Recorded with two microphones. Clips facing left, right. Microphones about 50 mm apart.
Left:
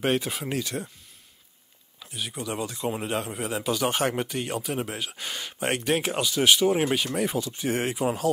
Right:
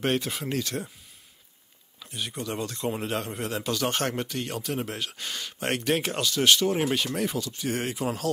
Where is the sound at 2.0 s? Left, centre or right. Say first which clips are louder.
Even; centre.